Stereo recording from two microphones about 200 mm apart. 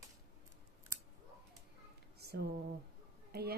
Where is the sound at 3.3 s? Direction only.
50° right (ahead or behind).